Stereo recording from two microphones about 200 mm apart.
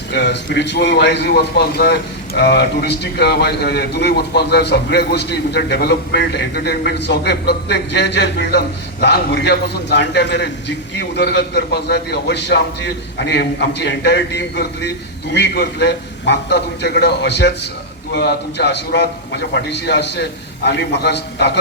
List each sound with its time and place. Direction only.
0.1 s a man's voice: 60° left (ahead or behind)